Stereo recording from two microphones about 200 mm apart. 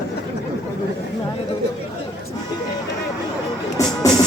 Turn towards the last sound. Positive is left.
turn(degrees=20)  # may be behind; listen again after turning